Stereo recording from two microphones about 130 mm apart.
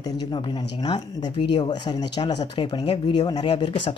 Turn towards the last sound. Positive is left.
turn(degrees=35)  # may be behind; listen again after turning